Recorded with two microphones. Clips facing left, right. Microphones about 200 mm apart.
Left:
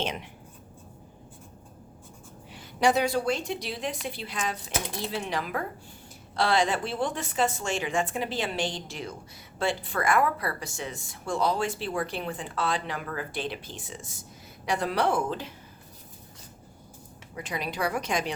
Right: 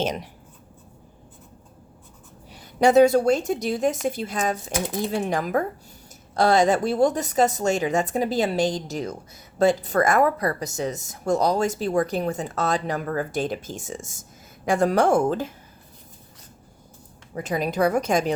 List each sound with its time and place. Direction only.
0.0 s a woman's voice: 40° right (ahead or behind)
2.5 s a woman's voice: 45° right (ahead or behind)
17.3 s speech: 45° right (ahead or behind)